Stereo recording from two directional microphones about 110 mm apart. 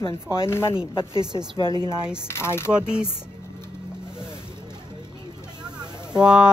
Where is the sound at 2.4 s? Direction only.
25° left (ahead or behind).